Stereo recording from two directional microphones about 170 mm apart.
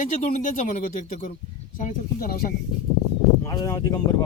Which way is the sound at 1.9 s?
60° left (ahead or behind).